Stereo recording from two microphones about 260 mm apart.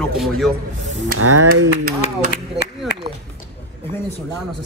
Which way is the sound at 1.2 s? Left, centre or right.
Right.